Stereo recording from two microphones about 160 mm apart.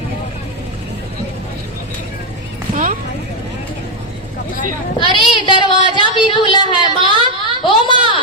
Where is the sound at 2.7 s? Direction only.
55° right (ahead or behind).